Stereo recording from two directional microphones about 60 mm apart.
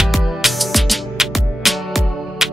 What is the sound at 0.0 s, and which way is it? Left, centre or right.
Music, centre.